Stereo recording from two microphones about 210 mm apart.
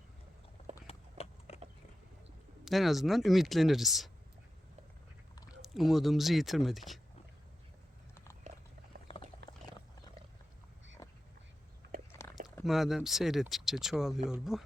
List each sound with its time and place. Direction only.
0.9 s clip-clop: 30° left (ahead or behind)
2.6 s speech: centre (ahead or behind)
5.6 s speech: centre (ahead or behind)
8.1 s biting: 15° left (ahead or behind)
8.9 s a sound: 45° right (ahead or behind)
11.8 s biting: 50° right (ahead or behind)
12.6 s speech: centre (ahead or behind)